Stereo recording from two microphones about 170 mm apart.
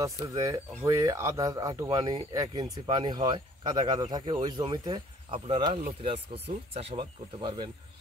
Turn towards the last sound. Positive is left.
turn(degrees=-30)  # may be behind; listen again after turning